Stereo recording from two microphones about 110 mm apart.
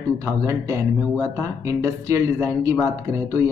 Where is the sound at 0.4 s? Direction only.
30° right (ahead or behind).